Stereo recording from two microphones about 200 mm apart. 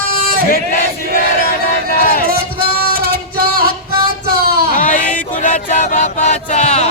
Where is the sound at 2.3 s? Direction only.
50° right (ahead or behind).